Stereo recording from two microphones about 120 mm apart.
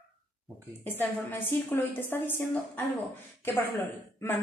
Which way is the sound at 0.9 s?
15° left (ahead or behind).